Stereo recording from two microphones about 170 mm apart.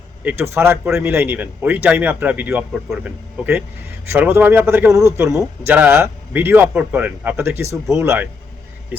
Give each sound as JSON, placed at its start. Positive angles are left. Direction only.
{"t": 0.3, "sound": "speech", "side_deg": -15}